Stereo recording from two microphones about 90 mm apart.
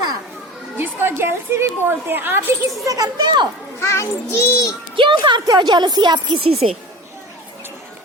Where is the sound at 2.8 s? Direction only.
45° right (ahead or behind).